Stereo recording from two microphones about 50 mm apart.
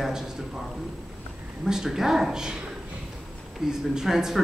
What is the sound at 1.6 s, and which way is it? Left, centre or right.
Speech, centre.